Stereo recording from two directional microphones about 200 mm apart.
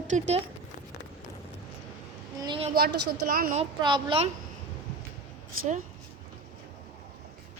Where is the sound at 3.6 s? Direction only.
25° right (ahead or behind).